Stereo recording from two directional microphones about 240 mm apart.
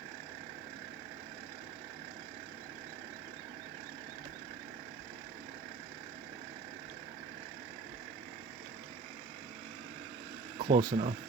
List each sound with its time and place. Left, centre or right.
10.6 s speech: right